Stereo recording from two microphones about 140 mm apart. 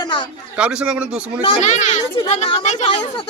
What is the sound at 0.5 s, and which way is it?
Speech, 10° right (ahead or behind).